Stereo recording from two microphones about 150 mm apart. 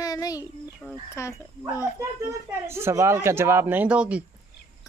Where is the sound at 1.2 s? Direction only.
20° left (ahead or behind).